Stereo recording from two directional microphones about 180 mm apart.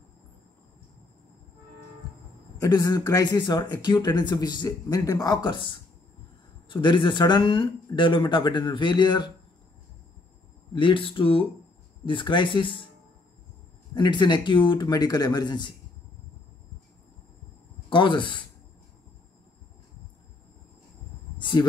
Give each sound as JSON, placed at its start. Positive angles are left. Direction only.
{"t": 2.6, "sound": "speech", "side_deg": 20}
{"t": 10.7, "sound": "speech", "side_deg": 30}
{"t": 13.9, "sound": "speech", "side_deg": 25}
{"t": 17.8, "sound": "speech", "side_deg": 25}
{"t": 21.4, "sound": "speech", "side_deg": 25}